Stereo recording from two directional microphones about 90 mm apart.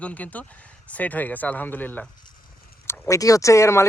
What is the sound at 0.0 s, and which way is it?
Speech, 15° left (ahead or behind).